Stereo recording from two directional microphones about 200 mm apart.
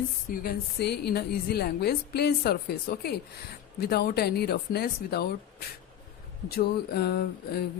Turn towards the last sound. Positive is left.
turn(degrees=55)  # may be behind; listen again after turning